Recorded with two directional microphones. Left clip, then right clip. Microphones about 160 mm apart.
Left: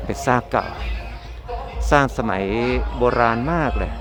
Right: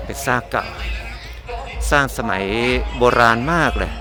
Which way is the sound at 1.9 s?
15° left (ahead or behind).